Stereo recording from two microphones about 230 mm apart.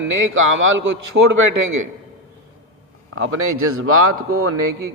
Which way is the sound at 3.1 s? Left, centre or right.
Right.